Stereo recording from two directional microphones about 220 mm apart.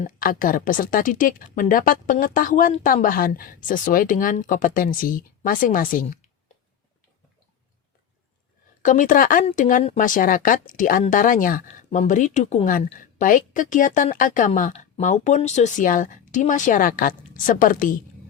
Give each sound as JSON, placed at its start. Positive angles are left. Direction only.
{"t": 0.0, "sound": "speech", "side_deg": 40}
{"t": 8.8, "sound": "speech", "side_deg": 35}